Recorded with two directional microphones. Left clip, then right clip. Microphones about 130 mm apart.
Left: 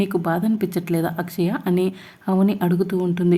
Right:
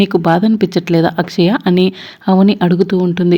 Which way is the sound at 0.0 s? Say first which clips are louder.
Right 10 dB; 35° right (ahead or behind).